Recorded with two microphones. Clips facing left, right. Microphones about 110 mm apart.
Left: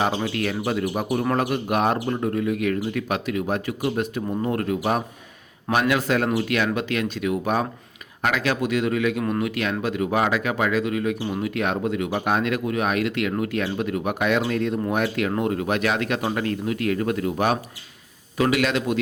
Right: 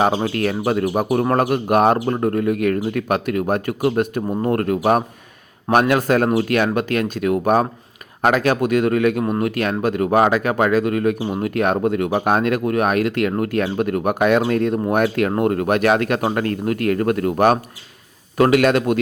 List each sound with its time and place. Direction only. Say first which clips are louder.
0.0 s speech: right 5 dB; 45° right (ahead or behind)